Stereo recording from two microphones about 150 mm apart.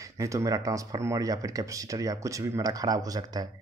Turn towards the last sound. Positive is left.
turn(degrees=-25)  # may be behind; listen again after turning